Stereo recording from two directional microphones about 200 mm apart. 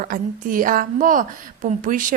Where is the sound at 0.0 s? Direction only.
45° right (ahead or behind).